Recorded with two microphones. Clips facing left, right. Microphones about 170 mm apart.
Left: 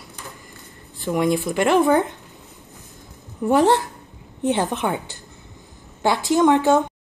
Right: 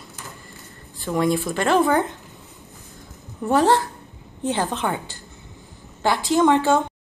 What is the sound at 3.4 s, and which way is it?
A woman's voice, 20° left (ahead or behind).